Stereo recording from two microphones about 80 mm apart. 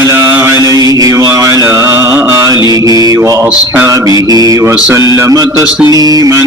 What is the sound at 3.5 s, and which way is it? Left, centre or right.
Mantra, centre.